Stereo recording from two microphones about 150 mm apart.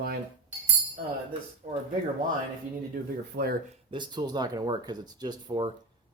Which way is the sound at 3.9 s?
30° right (ahead or behind).